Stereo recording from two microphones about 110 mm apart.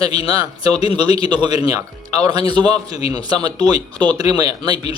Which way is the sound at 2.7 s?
65° left (ahead or behind).